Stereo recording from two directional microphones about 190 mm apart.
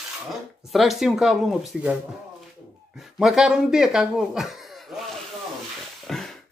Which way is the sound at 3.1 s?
Centre (ahead or behind).